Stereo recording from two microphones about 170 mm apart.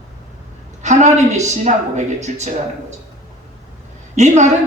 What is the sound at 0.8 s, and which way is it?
A woman's voice, 45° right (ahead or behind).